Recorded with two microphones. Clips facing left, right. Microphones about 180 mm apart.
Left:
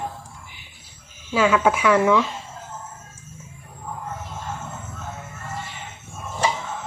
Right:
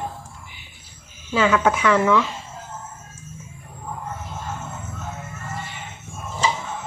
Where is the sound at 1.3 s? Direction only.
10° left (ahead or behind).